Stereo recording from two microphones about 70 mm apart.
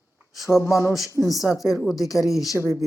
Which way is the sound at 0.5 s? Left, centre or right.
Left.